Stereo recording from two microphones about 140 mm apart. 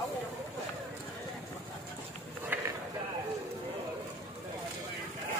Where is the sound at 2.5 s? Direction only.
15° right (ahead or behind).